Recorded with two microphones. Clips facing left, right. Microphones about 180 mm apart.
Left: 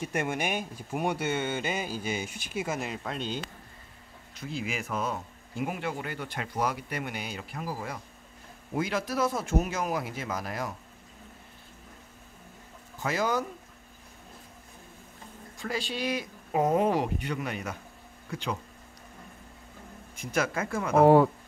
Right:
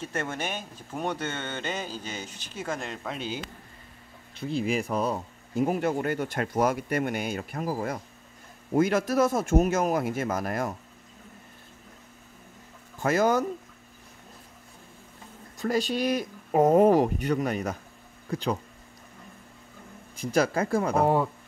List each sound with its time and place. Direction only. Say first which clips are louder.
0.0 s speech: left 2 dB; 15° left (ahead or behind); by 3.3 s 5° right (ahead or behind)
4.6 s speech: right 6 dB; 35° right (ahead or behind)
13.0 s speech: right 6 dB; 50° right (ahead or behind)
15.5 s speech: right 7 dB; 40° right (ahead or behind)
20.2 s speech: right 5 dB; 35° right (ahead or behind)
21.0 s speech: left 8 dB; 75° left (ahead or behind)